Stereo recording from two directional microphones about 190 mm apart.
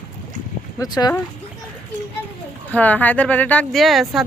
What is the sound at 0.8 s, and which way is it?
Speech, 20° left (ahead or behind).